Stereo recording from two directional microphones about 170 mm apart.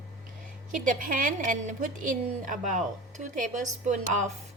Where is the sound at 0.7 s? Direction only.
50° right (ahead or behind).